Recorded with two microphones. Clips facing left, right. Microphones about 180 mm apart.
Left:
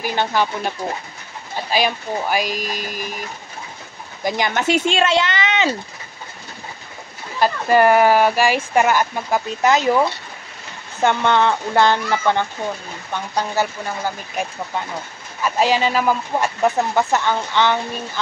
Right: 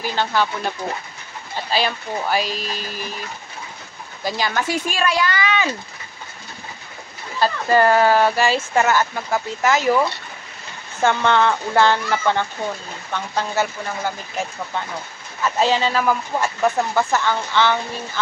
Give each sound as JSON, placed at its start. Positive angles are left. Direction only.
{"t": 0.0, "sound": "speech", "side_deg": 15}
{"t": 4.2, "sound": "speech", "side_deg": 20}
{"t": 7.3, "sound": "speech", "side_deg": 15}
{"t": 15.4, "sound": "speech", "side_deg": 15}